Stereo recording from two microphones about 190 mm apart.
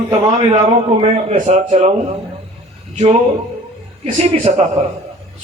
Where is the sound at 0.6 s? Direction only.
40° right (ahead or behind).